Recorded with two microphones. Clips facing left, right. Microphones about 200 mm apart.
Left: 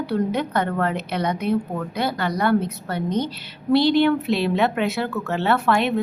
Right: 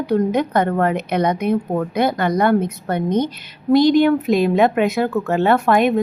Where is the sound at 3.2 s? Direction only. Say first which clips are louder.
Right 4 dB; 45° right (ahead or behind).